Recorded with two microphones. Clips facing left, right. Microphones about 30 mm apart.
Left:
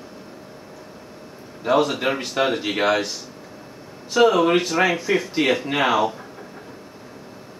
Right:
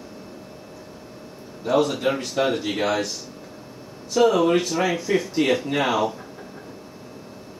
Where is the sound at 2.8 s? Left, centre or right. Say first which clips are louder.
Left 3 dB; left.